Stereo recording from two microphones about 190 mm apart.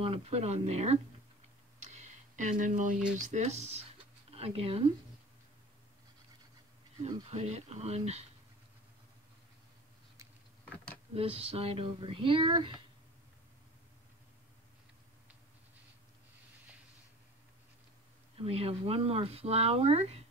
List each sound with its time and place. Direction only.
0.0 s speech: 30° right (ahead or behind)
1.9 s a sound: 40° right (ahead or behind)
3.2 s speech: 40° right (ahead or behind)
7.2 s speech: 35° right (ahead or behind)
11.1 s speech: 30° right (ahead or behind)
18.4 s speech: 30° right (ahead or behind)